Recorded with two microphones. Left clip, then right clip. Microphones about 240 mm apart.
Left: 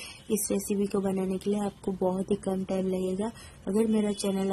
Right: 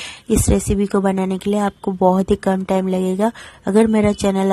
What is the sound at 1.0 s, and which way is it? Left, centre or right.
A woman's voice, right.